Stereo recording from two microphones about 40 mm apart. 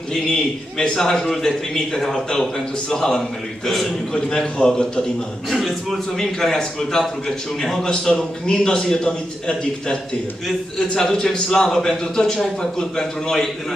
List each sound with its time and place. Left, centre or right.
0.9 s a man's voice: centre
4.1 s a man's voice: left
5.5 s a man's voice: centre
7.8 s a man's voice: centre
11.0 s a man's voice: centre